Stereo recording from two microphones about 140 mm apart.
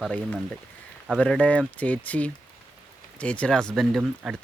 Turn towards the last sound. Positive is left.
turn(degrees=0)  # may be behind; listen again after turning